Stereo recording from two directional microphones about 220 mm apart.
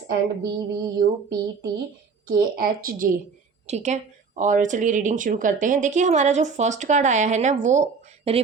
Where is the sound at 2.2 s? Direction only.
40° right (ahead or behind).